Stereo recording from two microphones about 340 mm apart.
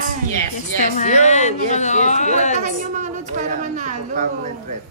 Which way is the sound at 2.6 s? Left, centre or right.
Right.